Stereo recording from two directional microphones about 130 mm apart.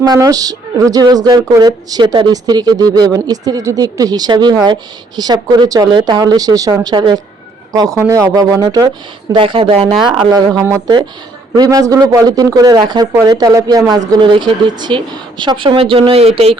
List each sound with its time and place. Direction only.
0.0 s a woman's voice: 30° right (ahead or behind)
7.9 s speech: 25° right (ahead or behind)
9.3 s a woman's voice: 40° right (ahead or behind)